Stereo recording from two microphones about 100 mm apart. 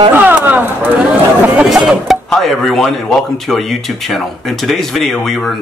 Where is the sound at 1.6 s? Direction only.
5° right (ahead or behind).